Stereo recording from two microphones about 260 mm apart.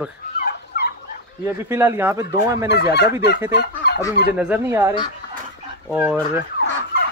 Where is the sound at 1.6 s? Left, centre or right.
Centre.